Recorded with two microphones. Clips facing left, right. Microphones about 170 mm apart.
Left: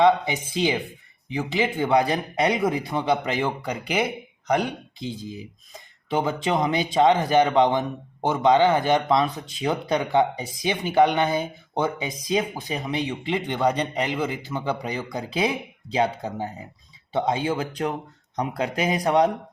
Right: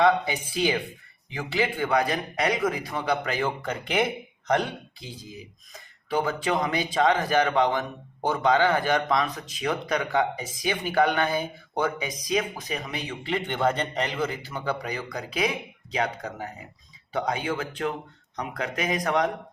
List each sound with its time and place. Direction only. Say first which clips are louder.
0.0 s speech: left 3 dB; 20° left (ahead or behind)
6.1 s speech: left 2 dB; 25° left (ahead or behind)